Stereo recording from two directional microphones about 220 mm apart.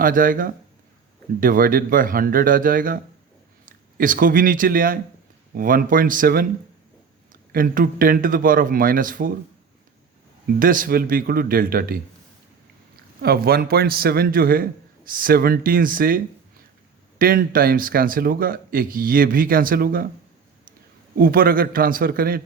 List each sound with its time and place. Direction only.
0.0 s speech: 40° right (ahead or behind)
7.5 s speech: 40° right (ahead or behind)
10.6 s speech: 40° right (ahead or behind)
13.2 s a man's voice: 45° right (ahead or behind)
21.2 s speech: 40° right (ahead or behind)